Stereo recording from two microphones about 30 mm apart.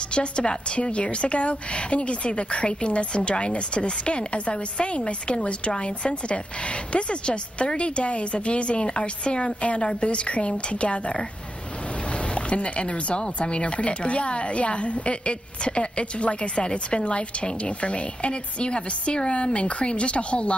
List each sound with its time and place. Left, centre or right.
0.1 s speech: left
12.4 s speech: left